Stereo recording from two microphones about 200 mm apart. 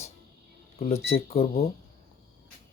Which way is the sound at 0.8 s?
35° left (ahead or behind).